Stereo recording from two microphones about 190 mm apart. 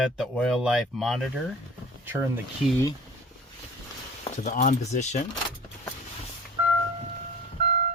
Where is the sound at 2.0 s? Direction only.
10° right (ahead or behind).